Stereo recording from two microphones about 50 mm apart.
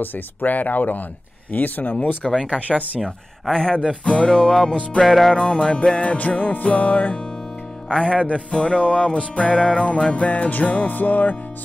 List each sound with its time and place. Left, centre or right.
0.0 s speech: left
3.0 s speech: centre
4.0 s music: left
4.3 s music: centre
5.3 s music: centre
7.9 s music: centre